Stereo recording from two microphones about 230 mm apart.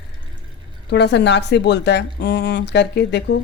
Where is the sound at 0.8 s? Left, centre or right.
Left.